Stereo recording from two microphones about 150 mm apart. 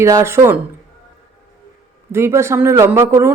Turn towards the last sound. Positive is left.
turn(degrees=-15)  # may be behind; listen again after turning